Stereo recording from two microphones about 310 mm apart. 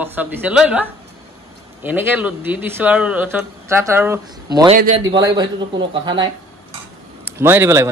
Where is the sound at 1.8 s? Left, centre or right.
Centre.